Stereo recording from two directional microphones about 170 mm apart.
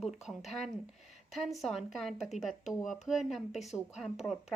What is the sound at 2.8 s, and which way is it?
Speech, 45° left (ahead or behind).